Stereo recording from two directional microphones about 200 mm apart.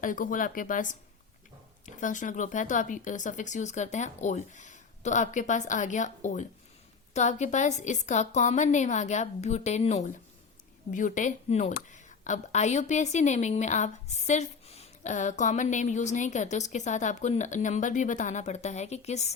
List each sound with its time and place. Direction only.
0.0 s speech: 40° left (ahead or behind)
2.0 s a woman's voice: 40° left (ahead or behind)